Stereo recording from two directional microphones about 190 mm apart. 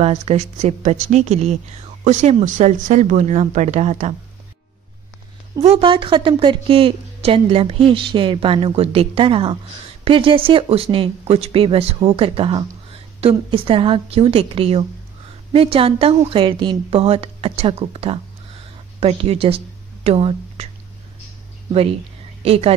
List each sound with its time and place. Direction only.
0.0 s speech: 35° right (ahead or behind)
5.6 s a woman's voice: 30° right (ahead or behind)
22.4 s speech: 30° right (ahead or behind)